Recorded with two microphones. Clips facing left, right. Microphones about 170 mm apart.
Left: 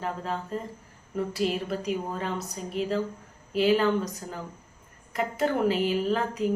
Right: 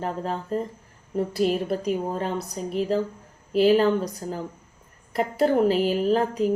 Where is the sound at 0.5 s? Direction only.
40° right (ahead or behind).